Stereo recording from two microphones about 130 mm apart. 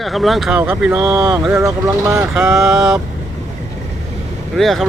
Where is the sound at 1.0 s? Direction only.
30° right (ahead or behind).